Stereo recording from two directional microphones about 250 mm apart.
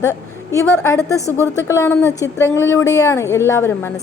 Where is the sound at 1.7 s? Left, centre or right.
Centre.